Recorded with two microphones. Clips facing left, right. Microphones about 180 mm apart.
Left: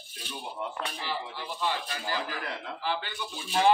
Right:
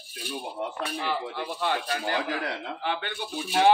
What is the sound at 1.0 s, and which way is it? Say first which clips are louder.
Speech: right 5 dB; 60° right (ahead or behind).